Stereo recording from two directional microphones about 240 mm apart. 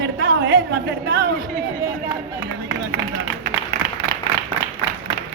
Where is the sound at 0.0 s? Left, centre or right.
Right.